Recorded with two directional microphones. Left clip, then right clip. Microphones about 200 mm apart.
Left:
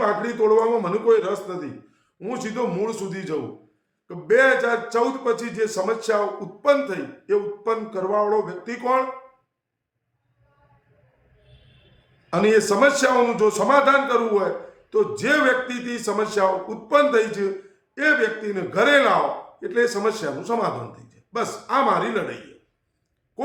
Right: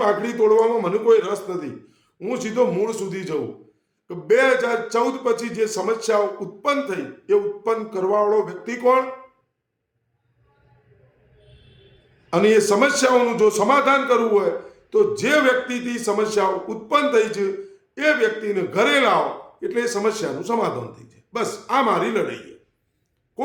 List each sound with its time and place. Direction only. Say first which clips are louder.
0.0 s a man's voice: right 2 dB; 15° right (ahead or behind)
12.3 s a man's voice: right 2 dB; 15° right (ahead or behind)